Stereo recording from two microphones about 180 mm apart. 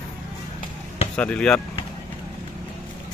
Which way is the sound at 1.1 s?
5° left (ahead or behind).